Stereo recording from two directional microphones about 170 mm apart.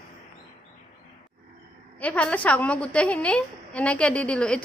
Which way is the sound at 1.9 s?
10° left (ahead or behind).